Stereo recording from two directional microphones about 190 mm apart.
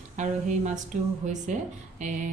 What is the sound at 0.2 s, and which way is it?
Speech, 40° right (ahead or behind).